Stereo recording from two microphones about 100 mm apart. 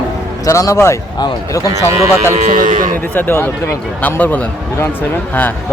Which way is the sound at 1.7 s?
30° right (ahead or behind).